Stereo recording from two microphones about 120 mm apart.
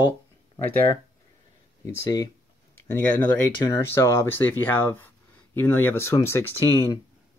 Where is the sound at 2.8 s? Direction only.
20° left (ahead or behind).